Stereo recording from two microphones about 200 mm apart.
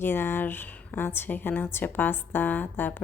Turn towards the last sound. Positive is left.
turn(degrees=10)  # may be behind; listen again after turning